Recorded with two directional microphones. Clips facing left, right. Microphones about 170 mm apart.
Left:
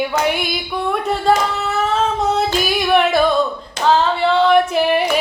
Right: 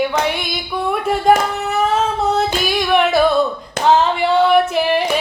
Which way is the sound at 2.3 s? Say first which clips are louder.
Even; centre (ahead or behind).